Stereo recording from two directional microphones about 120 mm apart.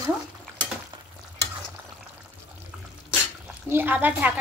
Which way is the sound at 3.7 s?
15° right (ahead or behind).